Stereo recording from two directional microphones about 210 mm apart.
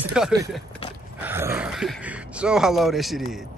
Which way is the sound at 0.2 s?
5° right (ahead or behind).